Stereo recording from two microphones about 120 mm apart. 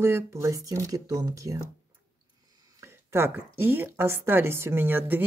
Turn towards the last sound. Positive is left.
turn(degrees=-15)  # may be behind; listen again after turning